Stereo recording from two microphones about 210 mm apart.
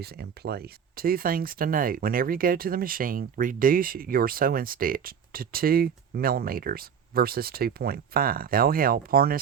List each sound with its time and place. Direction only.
0.0 s speech: 50° right (ahead or behind)